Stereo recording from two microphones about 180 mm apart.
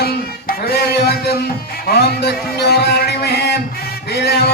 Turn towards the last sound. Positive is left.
turn(degrees=65)  # may be behind; listen again after turning